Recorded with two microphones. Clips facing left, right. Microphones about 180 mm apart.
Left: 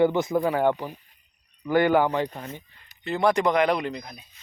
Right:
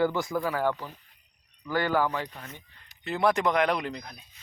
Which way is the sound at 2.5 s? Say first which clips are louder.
Left 7 dB; centre (ahead or behind).